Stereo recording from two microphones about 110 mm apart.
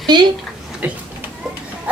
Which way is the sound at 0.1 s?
40° right (ahead or behind).